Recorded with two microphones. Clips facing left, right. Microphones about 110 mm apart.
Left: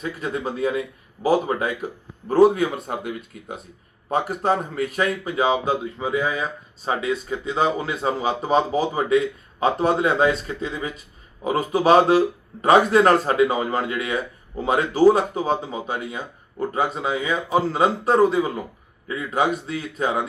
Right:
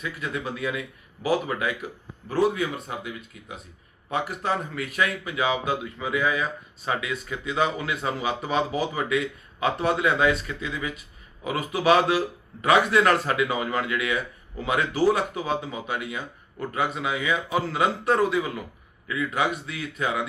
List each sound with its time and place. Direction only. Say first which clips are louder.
0.0 s speech: left 4 dB; 35° left (ahead or behind)